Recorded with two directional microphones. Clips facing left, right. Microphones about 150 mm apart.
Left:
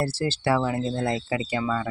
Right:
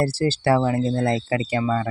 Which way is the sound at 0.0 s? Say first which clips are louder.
Right 5 dB; 35° right (ahead or behind).